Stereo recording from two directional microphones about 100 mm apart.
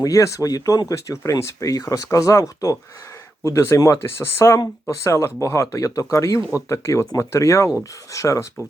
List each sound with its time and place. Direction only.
0.0 s speech: 35° left (ahead or behind)